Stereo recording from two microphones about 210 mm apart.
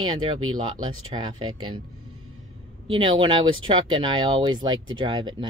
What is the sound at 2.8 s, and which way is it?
A woman's voice, 25° right (ahead or behind).